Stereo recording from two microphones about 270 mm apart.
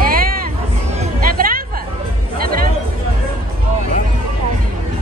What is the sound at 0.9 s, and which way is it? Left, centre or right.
Music, right.